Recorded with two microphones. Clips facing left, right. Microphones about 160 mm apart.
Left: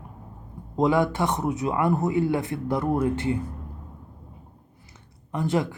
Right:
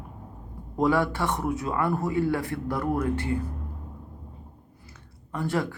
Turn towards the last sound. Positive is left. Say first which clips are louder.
# left 3 dB
turn(degrees=20)  # may be behind; listen again after turning